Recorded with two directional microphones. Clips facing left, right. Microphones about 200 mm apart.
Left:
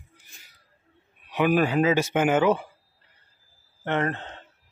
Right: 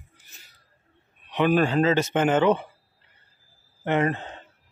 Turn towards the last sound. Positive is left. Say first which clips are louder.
# right 3 dB
turn(degrees=-10)  # may be behind; listen again after turning